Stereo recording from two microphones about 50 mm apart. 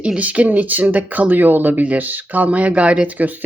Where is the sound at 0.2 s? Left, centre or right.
Right.